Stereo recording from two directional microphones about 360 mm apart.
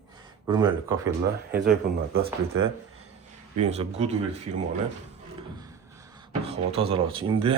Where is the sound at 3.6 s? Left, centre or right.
Centre.